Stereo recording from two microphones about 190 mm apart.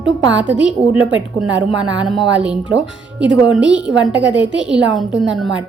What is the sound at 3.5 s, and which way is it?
A woman's voice, 5° right (ahead or behind).